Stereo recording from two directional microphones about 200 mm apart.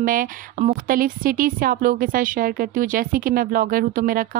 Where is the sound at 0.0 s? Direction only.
45° right (ahead or behind).